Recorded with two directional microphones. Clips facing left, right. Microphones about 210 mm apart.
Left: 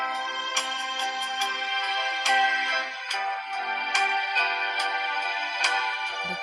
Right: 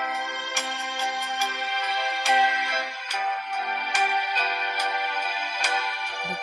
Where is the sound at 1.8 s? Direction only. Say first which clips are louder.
Right 4 dB; 30° right (ahead or behind).